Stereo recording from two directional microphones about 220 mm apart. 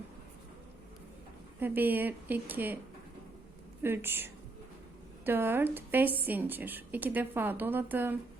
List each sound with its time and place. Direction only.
1.5 s a woman's voice: 10° right (ahead or behind)
3.8 s a woman's voice: 10° right (ahead or behind)